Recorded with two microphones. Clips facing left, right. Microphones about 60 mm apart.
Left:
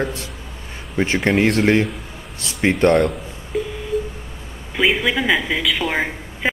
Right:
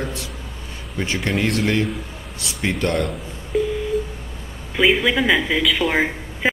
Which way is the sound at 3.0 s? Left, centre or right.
Centre.